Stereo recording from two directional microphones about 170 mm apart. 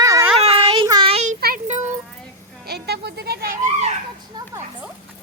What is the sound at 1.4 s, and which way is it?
Music, 50° right (ahead or behind).